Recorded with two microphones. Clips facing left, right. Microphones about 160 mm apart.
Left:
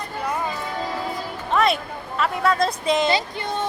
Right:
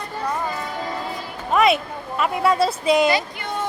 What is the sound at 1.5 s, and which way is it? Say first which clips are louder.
Speech: right 3 dB; 5° right (ahead or behind).